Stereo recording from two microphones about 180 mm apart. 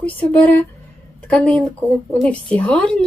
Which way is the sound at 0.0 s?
10° left (ahead or behind).